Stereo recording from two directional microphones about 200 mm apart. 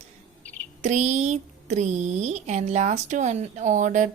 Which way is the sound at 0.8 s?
35° right (ahead or behind).